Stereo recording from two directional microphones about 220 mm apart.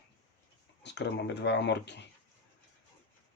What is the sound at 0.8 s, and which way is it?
Speech, 50° left (ahead or behind).